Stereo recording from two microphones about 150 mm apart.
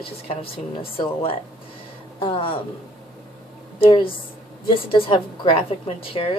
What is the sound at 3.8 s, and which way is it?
A woman's voice, 35° left (ahead or behind).